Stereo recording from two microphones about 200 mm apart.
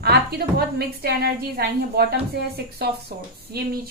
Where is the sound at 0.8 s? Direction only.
50° right (ahead or behind).